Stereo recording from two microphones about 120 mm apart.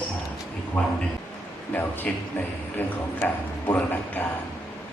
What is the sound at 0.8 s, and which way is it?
A man's voice, 10° left (ahead or behind).